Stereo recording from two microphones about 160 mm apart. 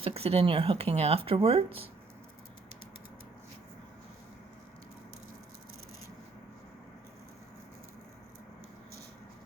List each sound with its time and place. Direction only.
0.0 s speech: 40° right (ahead or behind)